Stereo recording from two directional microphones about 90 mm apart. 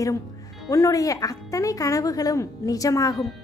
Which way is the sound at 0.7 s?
40° left (ahead or behind).